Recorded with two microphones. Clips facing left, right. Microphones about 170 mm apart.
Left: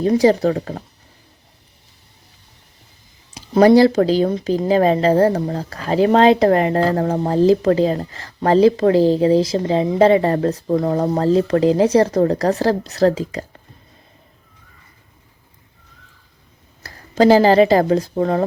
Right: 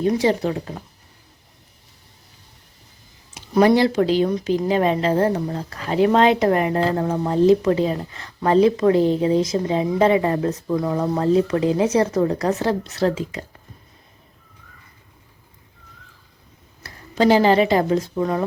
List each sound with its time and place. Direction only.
0.0 s speech: 35° left (ahead or behind)
3.3 s a sound: 30° left (ahead or behind)
3.8 s speech: 35° left (ahead or behind)
16.8 s speech: 35° left (ahead or behind)